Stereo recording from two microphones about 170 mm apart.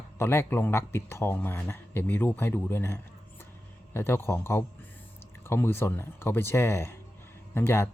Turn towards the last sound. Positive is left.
turn(degrees=15)  # may be behind; listen again after turning